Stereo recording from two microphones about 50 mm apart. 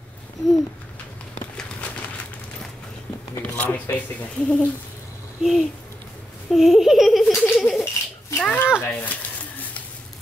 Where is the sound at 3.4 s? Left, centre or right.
Left.